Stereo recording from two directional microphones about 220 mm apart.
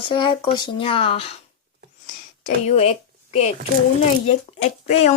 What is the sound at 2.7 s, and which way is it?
A woman's voice, 30° left (ahead or behind).